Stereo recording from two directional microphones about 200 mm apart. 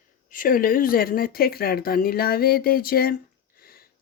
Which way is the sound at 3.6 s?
50° left (ahead or behind).